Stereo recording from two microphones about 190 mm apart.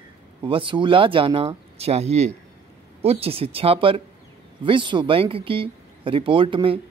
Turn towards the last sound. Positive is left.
turn(degrees=-25)  # may be behind; listen again after turning